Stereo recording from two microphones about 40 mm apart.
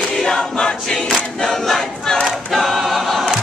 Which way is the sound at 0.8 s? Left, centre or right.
Centre.